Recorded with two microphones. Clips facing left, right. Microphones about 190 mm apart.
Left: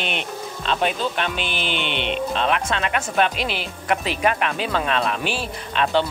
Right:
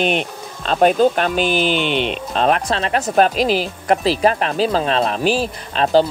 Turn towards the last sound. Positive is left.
turn(degrees=-35)  # may be behind; listen again after turning